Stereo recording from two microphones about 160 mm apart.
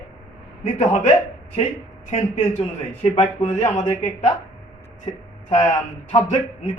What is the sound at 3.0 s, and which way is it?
A man's voice, 50° left (ahead or behind).